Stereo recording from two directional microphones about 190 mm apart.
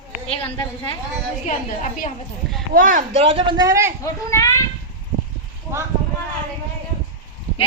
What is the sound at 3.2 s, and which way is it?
Speech, 30° right (ahead or behind).